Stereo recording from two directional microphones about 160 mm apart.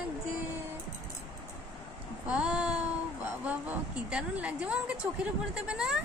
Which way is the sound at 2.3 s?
5° right (ahead or behind).